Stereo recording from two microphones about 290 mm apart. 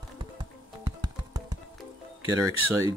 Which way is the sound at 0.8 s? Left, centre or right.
Centre.